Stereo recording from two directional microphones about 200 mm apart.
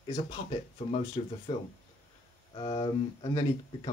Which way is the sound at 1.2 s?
25° left (ahead or behind).